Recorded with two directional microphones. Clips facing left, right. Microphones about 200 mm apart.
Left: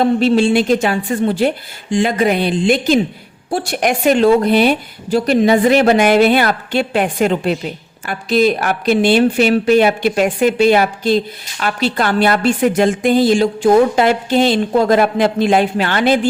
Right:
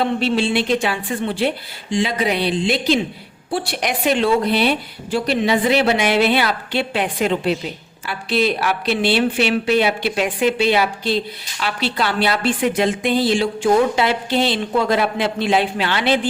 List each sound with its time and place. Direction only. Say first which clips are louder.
0.0 s a woman's voice: left 6 dB; 45° left (ahead or behind)